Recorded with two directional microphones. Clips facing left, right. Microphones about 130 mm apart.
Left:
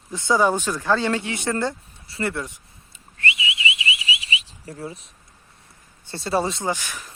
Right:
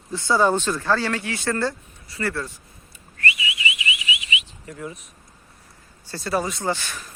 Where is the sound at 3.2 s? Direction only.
25° left (ahead or behind).